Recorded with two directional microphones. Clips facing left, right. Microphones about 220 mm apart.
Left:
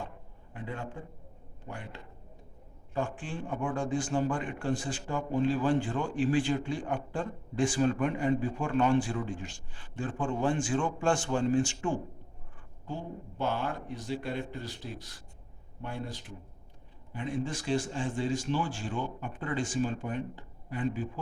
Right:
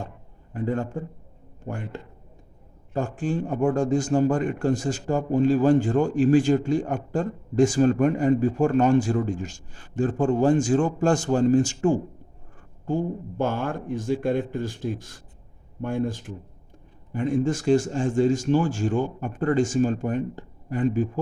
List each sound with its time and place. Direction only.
0.5 s a man's voice: 45° right (ahead or behind)